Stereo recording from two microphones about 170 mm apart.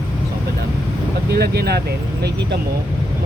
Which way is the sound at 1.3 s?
70° right (ahead or behind).